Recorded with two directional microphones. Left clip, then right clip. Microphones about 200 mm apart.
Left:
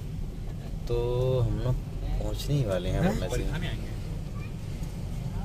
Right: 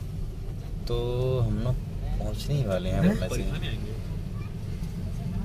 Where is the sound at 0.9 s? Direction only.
10° right (ahead or behind).